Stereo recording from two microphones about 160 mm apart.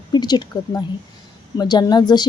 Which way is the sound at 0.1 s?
25° left (ahead or behind).